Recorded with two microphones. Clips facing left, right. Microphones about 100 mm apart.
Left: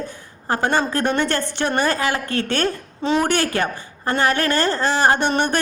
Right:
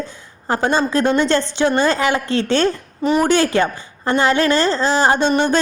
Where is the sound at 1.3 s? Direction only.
20° right (ahead or behind).